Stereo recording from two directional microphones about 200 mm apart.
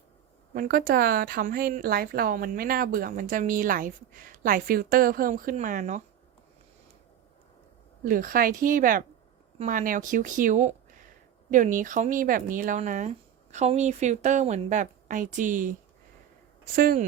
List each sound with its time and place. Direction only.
0.5 s a woman's voice: 45° right (ahead or behind)
8.0 s a woman's voice: 45° right (ahead or behind)
16.7 s a woman's voice: 45° right (ahead or behind)